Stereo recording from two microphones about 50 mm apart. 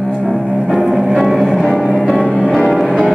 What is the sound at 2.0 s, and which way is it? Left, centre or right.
Music, centre.